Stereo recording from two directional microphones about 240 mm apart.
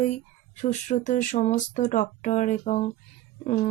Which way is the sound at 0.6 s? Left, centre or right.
Left.